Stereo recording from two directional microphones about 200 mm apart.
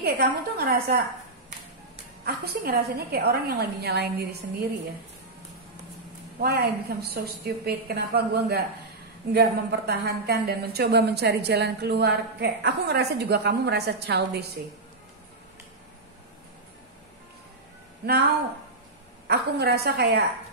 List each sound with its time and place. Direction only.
0.0 s a woman's voice: 50° right (ahead or behind)
2.2 s a woman's voice: 50° right (ahead or behind)
6.4 s a woman's voice: 50° right (ahead or behind)
18.0 s speech: 50° right (ahead or behind)
19.2 s a woman's voice: 50° right (ahead or behind)